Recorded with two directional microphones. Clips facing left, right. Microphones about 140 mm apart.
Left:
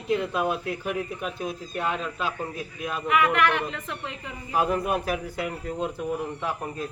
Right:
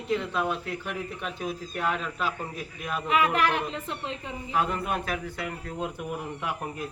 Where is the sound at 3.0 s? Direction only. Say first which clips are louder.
Left 2 dB; 30° right (ahead or behind).